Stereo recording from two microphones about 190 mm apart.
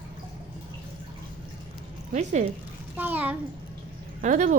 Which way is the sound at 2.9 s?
10° right (ahead or behind).